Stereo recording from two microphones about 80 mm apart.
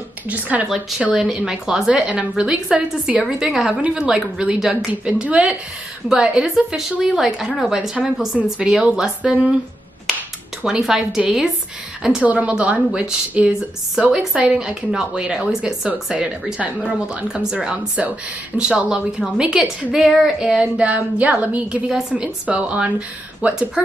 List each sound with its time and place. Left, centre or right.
0.3 s a woman's voice: centre
0.7 s a woman's voice: centre
10.6 s a woman's voice: centre
12.3 s a woman's voice: centre